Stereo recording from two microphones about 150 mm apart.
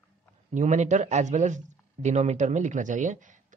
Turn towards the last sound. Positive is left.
turn(degrees=-55)  # may be behind; listen again after turning